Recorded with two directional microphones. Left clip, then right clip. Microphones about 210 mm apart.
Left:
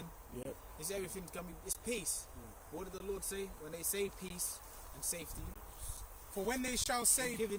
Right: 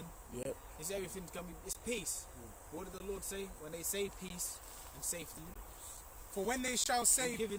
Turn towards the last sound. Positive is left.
turn(degrees=-10)  # may be behind; listen again after turning